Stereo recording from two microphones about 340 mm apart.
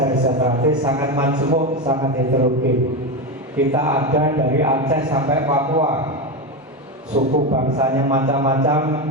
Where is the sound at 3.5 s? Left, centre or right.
Centre.